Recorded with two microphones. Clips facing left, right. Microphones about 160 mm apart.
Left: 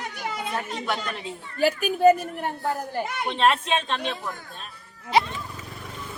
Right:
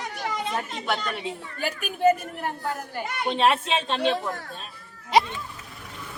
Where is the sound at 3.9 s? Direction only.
30° right (ahead or behind).